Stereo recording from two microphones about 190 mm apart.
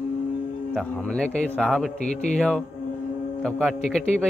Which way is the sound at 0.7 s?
5° left (ahead or behind).